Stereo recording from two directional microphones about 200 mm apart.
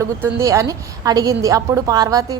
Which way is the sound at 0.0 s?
15° right (ahead or behind).